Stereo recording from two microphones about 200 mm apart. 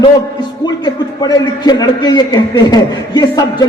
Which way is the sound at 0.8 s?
20° left (ahead or behind).